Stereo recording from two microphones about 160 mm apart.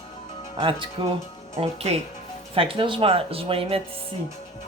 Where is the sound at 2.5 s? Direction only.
35° right (ahead or behind).